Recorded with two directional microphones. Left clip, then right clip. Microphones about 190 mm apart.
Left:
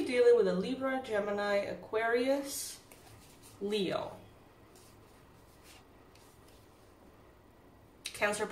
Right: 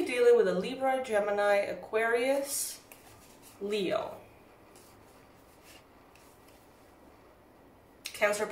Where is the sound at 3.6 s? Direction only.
10° left (ahead or behind).